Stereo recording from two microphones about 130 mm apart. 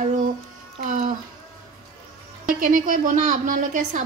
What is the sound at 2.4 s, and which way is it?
A woman's voice, 90° right.